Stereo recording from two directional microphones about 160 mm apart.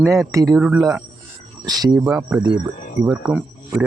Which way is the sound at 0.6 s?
5° right (ahead or behind).